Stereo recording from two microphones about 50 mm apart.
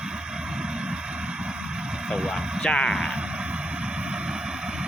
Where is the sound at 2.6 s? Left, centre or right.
Centre.